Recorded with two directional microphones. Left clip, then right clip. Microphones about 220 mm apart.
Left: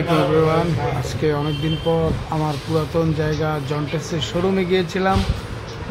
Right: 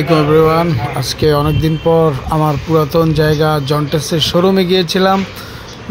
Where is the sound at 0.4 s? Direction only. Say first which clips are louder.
Right 7 dB; 25° right (ahead or behind).